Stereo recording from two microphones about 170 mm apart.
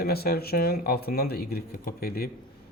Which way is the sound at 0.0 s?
65° left (ahead or behind).